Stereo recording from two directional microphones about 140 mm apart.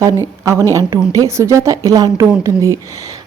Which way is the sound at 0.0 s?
20° right (ahead or behind).